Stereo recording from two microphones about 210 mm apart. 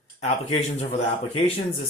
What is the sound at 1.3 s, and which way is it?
Speech, 30° left (ahead or behind).